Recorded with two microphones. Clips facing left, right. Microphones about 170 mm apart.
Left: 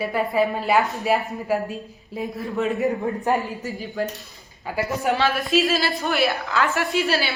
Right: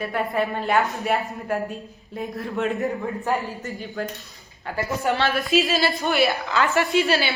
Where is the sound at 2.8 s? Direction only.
15° left (ahead or behind).